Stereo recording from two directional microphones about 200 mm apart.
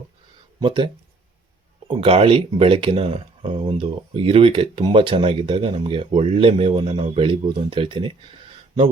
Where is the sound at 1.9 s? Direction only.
30° right (ahead or behind).